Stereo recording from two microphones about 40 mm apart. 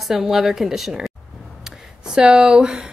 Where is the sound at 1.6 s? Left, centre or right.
Centre.